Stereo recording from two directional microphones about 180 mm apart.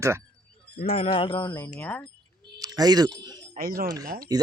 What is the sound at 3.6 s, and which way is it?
Speech, 55° right (ahead or behind).